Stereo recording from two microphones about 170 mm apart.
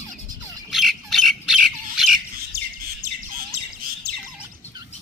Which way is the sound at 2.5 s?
60° right (ahead or behind).